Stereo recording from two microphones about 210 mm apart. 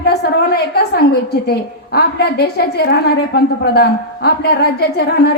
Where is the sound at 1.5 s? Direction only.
50° left (ahead or behind).